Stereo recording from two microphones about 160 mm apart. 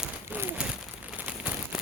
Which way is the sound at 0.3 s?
15° right (ahead or behind).